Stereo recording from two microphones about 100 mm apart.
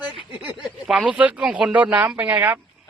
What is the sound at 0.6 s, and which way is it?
Speech, 5° right (ahead or behind).